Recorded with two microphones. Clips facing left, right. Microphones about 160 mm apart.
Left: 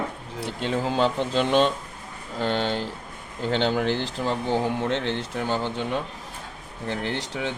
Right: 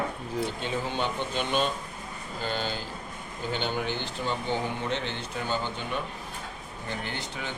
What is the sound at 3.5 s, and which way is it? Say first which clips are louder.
Speech: left 8 dB; 90° left.